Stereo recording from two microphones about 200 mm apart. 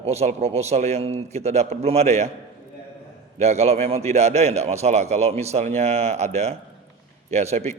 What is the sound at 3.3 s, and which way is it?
A man's voice, 35° right (ahead or behind).